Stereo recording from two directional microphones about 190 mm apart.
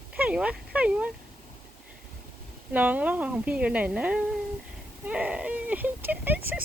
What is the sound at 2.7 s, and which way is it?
Speech, 10° right (ahead or behind).